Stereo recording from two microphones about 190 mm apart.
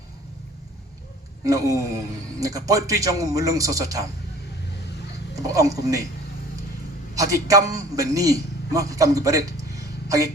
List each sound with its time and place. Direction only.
1.5 s a man's voice: 15° right (ahead or behind)
5.3 s a woman's voice: 15° right (ahead or behind)
7.2 s a man's voice: 15° right (ahead or behind)